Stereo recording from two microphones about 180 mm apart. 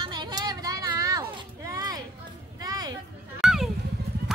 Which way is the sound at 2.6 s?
20° right (ahead or behind).